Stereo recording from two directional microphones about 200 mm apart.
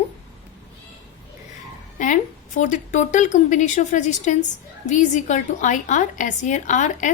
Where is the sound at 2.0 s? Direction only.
40° left (ahead or behind).